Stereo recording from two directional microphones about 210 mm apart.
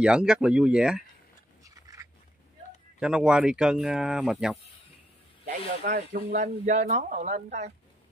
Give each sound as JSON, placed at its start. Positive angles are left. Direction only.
{"t": 0.0, "sound": "speech", "side_deg": -5}
{"t": 1.6, "sound": "a sound", "side_deg": -15}
{"t": 3.0, "sound": "speech", "side_deg": -5}
{"t": 5.5, "sound": "speech", "side_deg": -45}
{"t": 6.4, "sound": "speech", "side_deg": -35}